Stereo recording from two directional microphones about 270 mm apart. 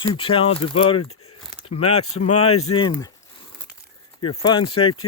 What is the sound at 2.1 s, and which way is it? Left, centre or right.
Speech, left.